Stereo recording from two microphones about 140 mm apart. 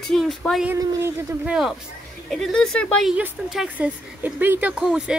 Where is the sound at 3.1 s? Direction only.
5° right (ahead or behind).